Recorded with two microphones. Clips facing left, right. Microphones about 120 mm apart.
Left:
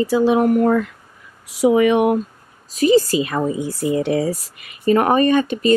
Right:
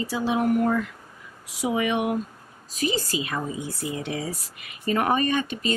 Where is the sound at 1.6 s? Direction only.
60° left (ahead or behind).